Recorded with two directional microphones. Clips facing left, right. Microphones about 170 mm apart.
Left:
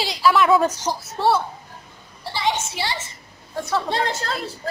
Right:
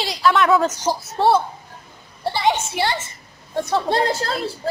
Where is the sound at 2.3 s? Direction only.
55° right (ahead or behind).